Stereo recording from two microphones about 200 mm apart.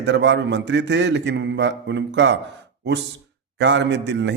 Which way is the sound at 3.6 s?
60° right (ahead or behind).